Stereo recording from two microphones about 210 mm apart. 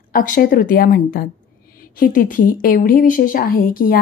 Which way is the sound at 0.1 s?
40° left (ahead or behind).